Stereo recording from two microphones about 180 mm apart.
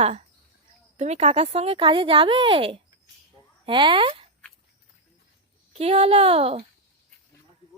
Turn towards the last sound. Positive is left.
turn(degrees=-35)  # may be behind; listen again after turning